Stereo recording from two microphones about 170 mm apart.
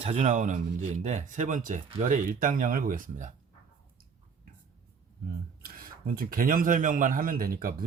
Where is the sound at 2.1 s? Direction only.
50° right (ahead or behind).